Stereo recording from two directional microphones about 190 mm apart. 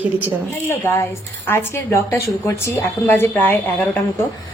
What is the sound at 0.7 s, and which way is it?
A woman's voice, 10° left (ahead or behind).